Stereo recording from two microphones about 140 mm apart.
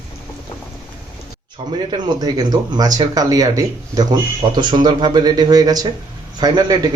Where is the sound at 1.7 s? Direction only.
35° right (ahead or behind).